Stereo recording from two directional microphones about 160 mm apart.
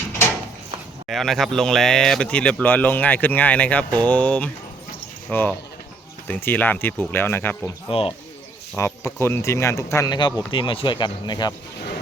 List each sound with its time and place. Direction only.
1.0 s speech: centre (ahead or behind)
7.9 s speech: 35° left (ahead or behind)
8.7 s speech: 15° left (ahead or behind)
10.2 s speech: 30° left (ahead or behind)